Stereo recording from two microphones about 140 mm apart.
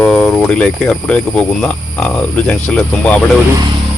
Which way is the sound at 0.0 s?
5° left (ahead or behind).